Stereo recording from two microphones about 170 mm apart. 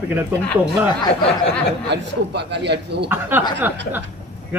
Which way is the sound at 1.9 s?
90° right.